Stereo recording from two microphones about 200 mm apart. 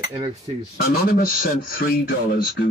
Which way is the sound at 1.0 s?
45° left (ahead or behind).